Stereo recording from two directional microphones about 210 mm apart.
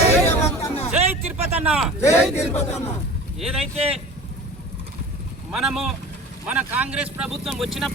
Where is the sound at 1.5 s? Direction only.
5° right (ahead or behind).